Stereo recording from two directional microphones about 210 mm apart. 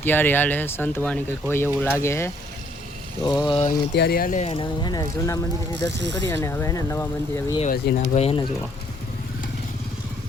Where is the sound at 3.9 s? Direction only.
45° left (ahead or behind); by 7.6 s 15° left (ahead or behind).